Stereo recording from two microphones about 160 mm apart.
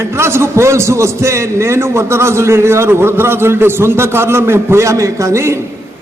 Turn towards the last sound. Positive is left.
turn(degrees=-15)  # may be behind; listen again after turning